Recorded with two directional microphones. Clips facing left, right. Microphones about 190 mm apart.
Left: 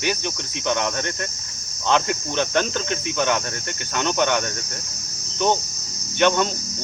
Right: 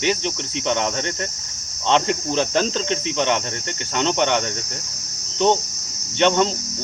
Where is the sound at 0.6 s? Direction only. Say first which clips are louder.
Right 1 dB; 30° right (ahead or behind).